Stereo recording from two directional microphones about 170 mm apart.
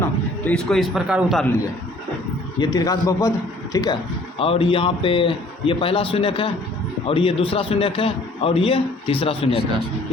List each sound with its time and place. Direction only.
0.0 s a man's voice: 5° left (ahead or behind)
2.6 s speech: 25° left (ahead or behind)
4.4 s a man's voice: 30° left (ahead or behind)